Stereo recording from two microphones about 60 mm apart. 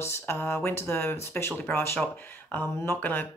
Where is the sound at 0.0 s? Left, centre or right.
Left.